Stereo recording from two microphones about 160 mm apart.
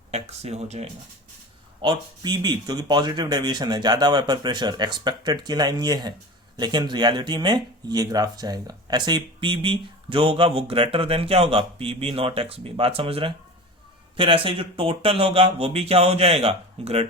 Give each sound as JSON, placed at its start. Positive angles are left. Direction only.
{"t": 0.1, "sound": "speech", "side_deg": -40}
{"t": 1.8, "sound": "speech", "side_deg": -25}